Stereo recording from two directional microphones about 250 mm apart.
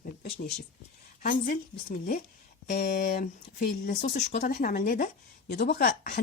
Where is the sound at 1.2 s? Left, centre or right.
Left.